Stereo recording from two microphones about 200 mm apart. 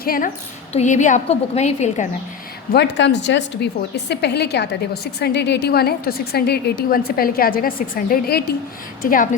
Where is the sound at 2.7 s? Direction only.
60° left (ahead or behind).